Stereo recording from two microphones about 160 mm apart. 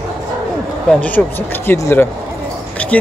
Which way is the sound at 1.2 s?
Centre (ahead or behind).